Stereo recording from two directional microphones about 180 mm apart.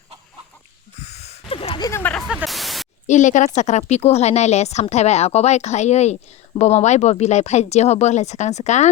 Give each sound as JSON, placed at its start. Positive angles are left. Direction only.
{"t": 1.0, "sound": "a sound", "side_deg": 40}
{"t": 1.9, "sound": "speech", "side_deg": 10}
{"t": 2.2, "sound": "static", "side_deg": -5}
{"t": 3.1, "sound": "a woman's voice", "side_deg": 45}